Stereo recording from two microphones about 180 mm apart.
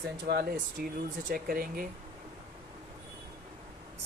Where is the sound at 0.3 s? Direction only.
60° right (ahead or behind).